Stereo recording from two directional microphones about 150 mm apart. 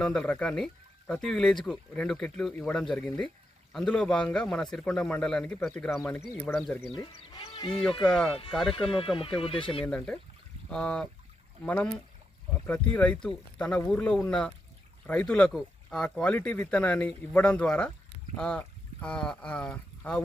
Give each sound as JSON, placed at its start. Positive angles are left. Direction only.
{"t": 0.0, "sound": "speech", "side_deg": 5}
{"t": 6.9, "sound": "speech", "side_deg": 35}
{"t": 8.0, "sound": "speech", "side_deg": 5}
{"t": 8.7, "sound": "speech", "side_deg": 40}
{"t": 9.8, "sound": "speech", "side_deg": 10}